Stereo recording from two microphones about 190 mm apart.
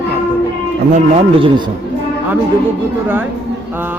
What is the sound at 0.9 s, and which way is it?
Speech, 30° right (ahead or behind).